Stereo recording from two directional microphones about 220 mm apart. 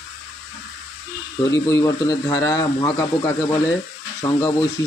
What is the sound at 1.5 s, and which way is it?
Speech, 15° left (ahead or behind).